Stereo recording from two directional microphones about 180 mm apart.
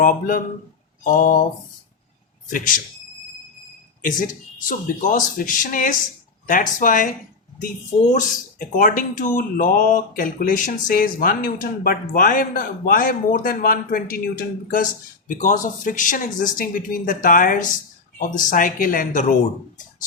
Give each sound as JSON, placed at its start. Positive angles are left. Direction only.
{"t": 0.0, "sound": "speech", "side_deg": 50}
{"t": 2.5, "sound": "speech", "side_deg": 50}
{"t": 5.0, "sound": "speech", "side_deg": 45}
{"t": 8.1, "sound": "speech", "side_deg": 45}